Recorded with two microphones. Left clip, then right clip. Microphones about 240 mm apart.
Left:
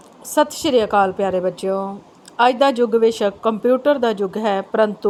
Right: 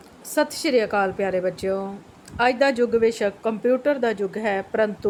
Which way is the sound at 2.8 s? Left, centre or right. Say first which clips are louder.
Left 4 dB; left.